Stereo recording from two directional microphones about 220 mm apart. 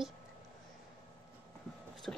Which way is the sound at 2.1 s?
5° left (ahead or behind).